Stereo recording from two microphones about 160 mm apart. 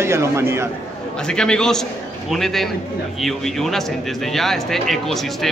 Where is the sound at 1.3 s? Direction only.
5° left (ahead or behind).